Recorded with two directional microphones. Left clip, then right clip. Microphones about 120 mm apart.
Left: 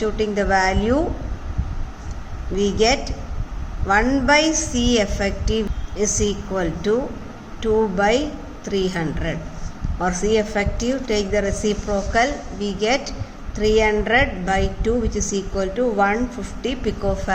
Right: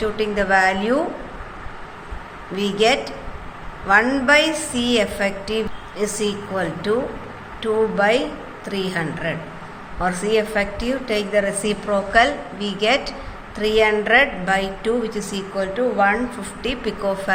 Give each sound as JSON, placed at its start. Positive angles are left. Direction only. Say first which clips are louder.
{"t": 0.0, "sound": "a woman's voice", "louder": "even", "side_deg": 50}
{"t": 2.6, "sound": "a woman's voice", "louder": "right 1 dB", "side_deg": 50}